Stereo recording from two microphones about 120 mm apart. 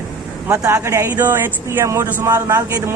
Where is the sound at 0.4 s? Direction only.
25° right (ahead or behind).